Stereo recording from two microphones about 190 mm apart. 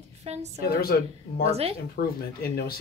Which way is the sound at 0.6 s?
50° left (ahead or behind).